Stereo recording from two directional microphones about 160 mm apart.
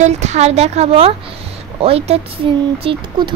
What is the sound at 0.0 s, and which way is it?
A woman's voice, 45° right (ahead or behind).